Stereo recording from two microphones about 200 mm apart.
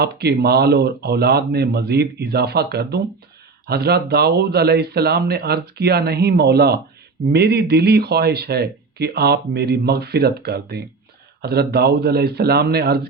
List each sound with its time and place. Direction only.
0.0 s speech: 55° right (ahead or behind)